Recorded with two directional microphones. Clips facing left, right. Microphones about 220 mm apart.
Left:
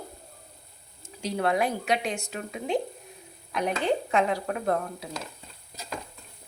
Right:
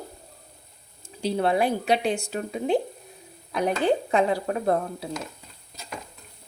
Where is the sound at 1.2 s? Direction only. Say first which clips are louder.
Right 3 dB; 30° right (ahead or behind).